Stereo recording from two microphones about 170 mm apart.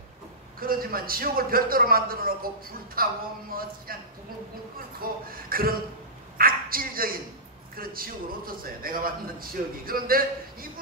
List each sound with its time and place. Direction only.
0.6 s a man's voice: 60° right (ahead or behind)
5.0 s a man's voice: 60° right (ahead or behind)
6.3 s a sound: 60° right (ahead or behind)
7.7 s a man's voice: 60° right (ahead or behind)